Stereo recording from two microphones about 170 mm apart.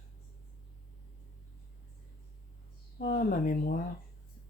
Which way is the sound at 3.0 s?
55° left (ahead or behind).